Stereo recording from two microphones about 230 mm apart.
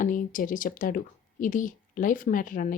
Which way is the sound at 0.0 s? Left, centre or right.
Left.